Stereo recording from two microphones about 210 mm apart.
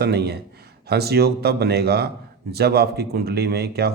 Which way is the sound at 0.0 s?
50° right (ahead or behind).